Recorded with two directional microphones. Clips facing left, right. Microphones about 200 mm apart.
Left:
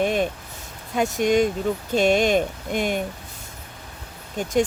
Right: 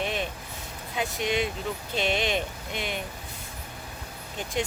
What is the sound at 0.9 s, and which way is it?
Speech, 45° left (ahead or behind).